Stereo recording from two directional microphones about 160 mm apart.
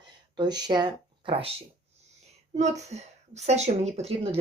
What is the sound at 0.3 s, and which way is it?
Speech, 25° right (ahead or behind).